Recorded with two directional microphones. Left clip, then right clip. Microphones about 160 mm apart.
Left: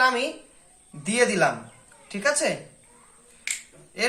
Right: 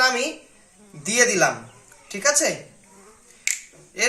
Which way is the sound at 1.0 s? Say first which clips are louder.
Right 3 dB; 30° right (ahead or behind).